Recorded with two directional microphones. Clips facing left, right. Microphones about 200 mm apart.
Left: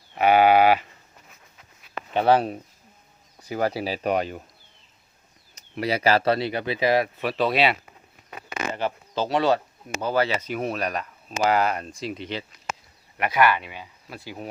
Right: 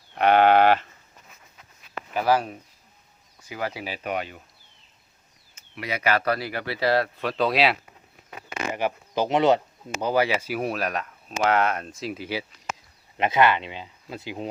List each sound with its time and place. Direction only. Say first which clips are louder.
0.1 s sheep: even; 5° left (ahead or behind)
2.1 s speech: left 3 dB; 30° left (ahead or behind)
5.5 s speech: left 6 dB; 35° left (ahead or behind); by 7.8 s centre (ahead or behind)
8.7 s speech: right 3 dB; 15° right (ahead or behind)
13.1 s speech: right 1 dB; 25° right (ahead or behind)